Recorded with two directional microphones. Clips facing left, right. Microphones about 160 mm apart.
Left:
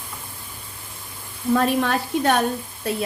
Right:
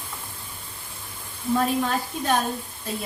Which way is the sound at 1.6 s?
70° left (ahead or behind).